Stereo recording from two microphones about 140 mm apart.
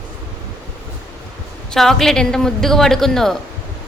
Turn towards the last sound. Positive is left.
turn(degrees=0)  # may be behind; listen again after turning